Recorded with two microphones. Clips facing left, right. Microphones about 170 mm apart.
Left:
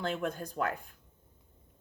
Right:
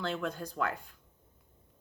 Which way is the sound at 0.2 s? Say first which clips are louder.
Left 1 dB; 50° left (ahead or behind).